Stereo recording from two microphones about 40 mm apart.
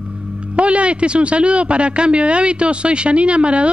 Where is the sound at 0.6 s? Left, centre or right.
Right.